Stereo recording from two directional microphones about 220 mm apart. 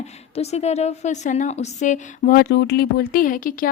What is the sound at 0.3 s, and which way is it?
A woman's voice, 30° left (ahead or behind).